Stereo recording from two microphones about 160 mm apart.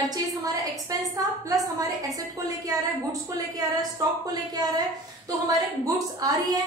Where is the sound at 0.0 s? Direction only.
25° right (ahead or behind).